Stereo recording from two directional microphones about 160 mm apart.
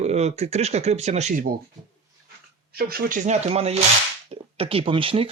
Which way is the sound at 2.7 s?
70° right (ahead or behind).